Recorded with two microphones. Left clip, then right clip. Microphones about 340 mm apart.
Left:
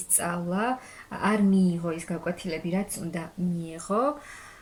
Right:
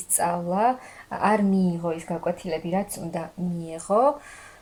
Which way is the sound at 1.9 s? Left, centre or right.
Right.